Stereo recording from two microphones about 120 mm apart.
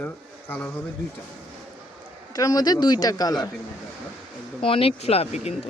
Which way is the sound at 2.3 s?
30° left (ahead or behind).